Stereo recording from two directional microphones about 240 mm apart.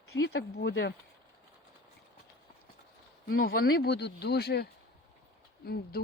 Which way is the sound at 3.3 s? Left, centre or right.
Left.